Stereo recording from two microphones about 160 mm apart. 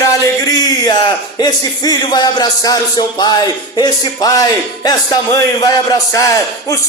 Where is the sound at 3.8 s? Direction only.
25° left (ahead or behind).